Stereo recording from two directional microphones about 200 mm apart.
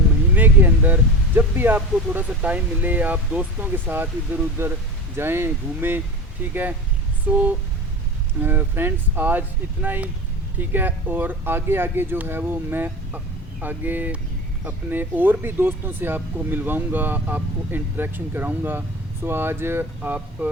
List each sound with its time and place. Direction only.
0.3 s vehicle: 10° right (ahead or behind)
1.4 s speech: 10° right (ahead or behind)